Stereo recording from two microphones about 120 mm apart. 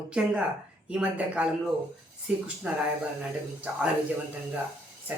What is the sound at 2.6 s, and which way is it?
Speech, 15° right (ahead or behind).